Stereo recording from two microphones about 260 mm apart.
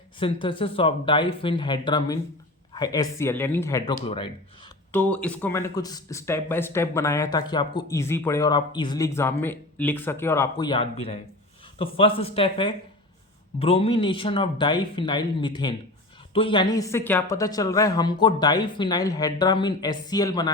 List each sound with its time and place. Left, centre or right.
0.2 s speech: centre
4.9 s speech: centre